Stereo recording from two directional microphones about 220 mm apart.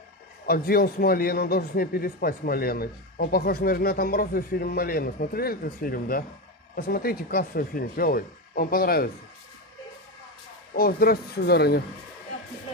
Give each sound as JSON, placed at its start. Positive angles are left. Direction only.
{"t": 0.5, "sound": "a man's voice", "side_deg": 45}
{"t": 10.7, "sound": "a man's voice", "side_deg": 45}